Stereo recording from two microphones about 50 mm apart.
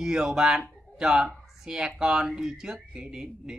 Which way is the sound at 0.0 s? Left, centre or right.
Centre.